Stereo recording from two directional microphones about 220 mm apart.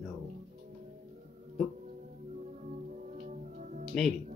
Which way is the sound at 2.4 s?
35° right (ahead or behind).